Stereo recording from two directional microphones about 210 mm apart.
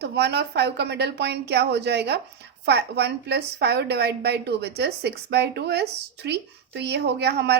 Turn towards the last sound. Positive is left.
turn(degrees=-50)  # may be behind; listen again after turning